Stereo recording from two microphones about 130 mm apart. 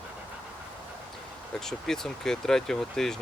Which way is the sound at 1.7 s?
5° left (ahead or behind).